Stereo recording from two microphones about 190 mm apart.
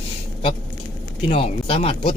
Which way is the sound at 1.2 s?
30° left (ahead or behind).